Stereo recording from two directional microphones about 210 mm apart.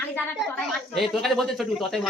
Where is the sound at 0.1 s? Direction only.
5° left (ahead or behind).